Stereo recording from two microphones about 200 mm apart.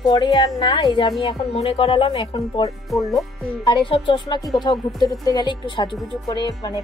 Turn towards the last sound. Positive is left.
turn(degrees=20)  # may be behind; listen again after turning